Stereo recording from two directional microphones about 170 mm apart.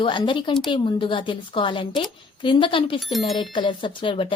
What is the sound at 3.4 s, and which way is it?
Speech, 30° left (ahead or behind).